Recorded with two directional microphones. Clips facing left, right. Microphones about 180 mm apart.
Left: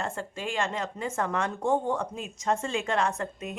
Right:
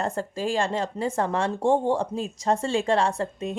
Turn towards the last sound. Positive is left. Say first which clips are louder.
# right 5 dB
turn(degrees=-30)  # may be behind; listen again after turning